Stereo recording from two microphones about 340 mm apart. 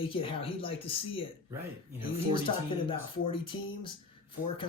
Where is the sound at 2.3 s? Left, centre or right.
Centre.